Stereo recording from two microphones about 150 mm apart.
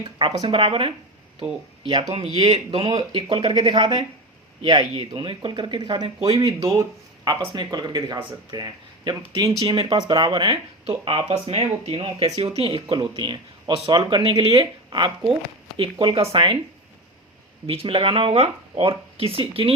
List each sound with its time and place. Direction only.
0.3 s speech: 35° right (ahead or behind)
17.7 s speech: 35° right (ahead or behind)